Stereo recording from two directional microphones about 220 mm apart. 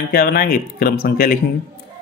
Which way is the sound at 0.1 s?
40° left (ahead or behind).